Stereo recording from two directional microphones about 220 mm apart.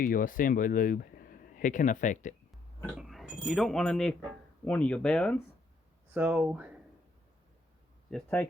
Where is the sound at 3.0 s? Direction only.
Centre (ahead or behind).